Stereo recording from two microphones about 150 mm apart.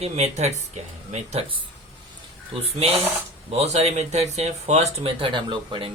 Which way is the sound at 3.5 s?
45° right (ahead or behind).